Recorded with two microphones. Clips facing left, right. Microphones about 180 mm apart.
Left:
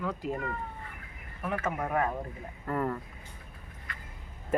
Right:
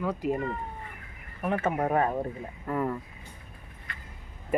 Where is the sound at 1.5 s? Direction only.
30° right (ahead or behind).